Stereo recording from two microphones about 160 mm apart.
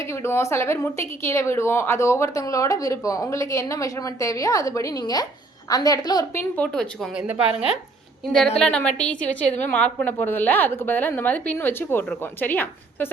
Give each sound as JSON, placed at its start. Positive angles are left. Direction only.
{"t": 0.1, "sound": "a woman's voice", "side_deg": 15}
{"t": 6.6, "sound": "speech", "side_deg": 5}
{"t": 7.3, "sound": "a woman's voice", "side_deg": -5}
{"t": 8.5, "sound": "a woman's voice", "side_deg": 5}